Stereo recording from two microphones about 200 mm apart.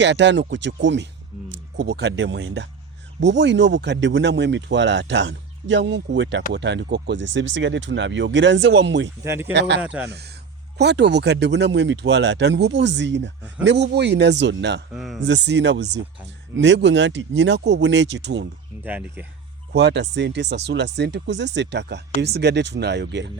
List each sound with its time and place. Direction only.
0.0 s speech: 60° right (ahead or behind)
9.2 s speech: 15° right (ahead or behind)
9.5 s speech: 60° right (ahead or behind)
9.8 s speech: 5° right (ahead or behind)
10.1 s speech: 55° right (ahead or behind)
14.9 s speech: centre (ahead or behind)
15.3 s speech: 60° right (ahead or behind)
18.9 s speech: 10° right (ahead or behind)
19.7 s speech: 60° right (ahead or behind)